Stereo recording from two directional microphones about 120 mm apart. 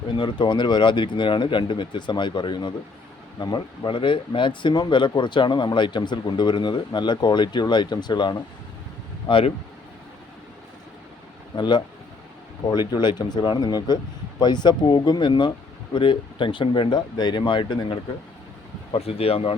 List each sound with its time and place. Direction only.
0.1 s speech: 40° left (ahead or behind)
9.2 s speech: 50° left (ahead or behind)
11.5 s speech: 40° left (ahead or behind)
12.9 s speech: 35° left (ahead or behind)
18.9 s speech: 55° left (ahead or behind)